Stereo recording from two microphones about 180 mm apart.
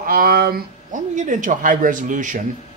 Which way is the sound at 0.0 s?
55° right (ahead or behind).